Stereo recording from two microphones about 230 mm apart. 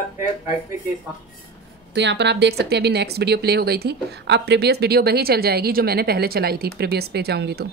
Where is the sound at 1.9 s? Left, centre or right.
Right.